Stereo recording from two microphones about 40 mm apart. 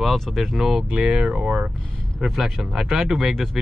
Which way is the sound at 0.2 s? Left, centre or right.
Centre.